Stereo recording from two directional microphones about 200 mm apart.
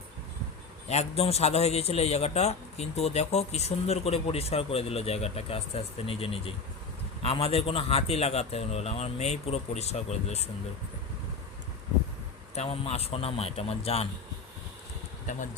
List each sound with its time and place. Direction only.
0.9 s a man's voice: 30° left (ahead or behind)
12.5 s a man's voice: 30° left (ahead or behind)